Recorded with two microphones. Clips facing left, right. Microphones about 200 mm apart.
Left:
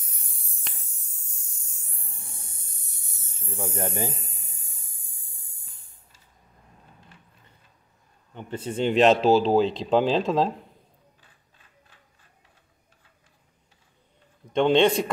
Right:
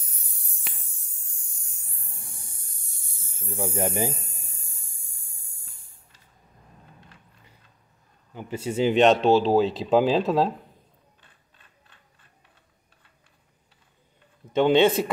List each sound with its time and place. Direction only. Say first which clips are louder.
0.7 s spray: right 1 dB; 5° right (ahead or behind)
2.0 s a sound: even; 25° left (ahead or behind)
3.4 s speech: right 3 dB; 15° right (ahead or behind)
4.2 s a sound: even; 20° left (ahead or behind)
8.4 s speech: right 2 dB; 10° right (ahead or behind)
14.5 s speech: right 1 dB; 5° right (ahead or behind)